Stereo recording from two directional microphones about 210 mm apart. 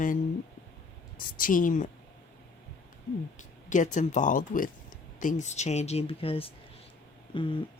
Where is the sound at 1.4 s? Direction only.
40° left (ahead or behind).